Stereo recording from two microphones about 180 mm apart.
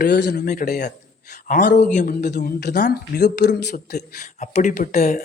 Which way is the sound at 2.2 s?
45° left (ahead or behind).